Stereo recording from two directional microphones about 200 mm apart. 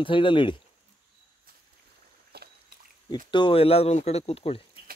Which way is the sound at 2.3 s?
55° right (ahead or behind).